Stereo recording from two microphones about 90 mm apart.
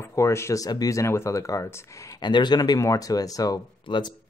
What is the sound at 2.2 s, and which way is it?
Speech, 50° left (ahead or behind).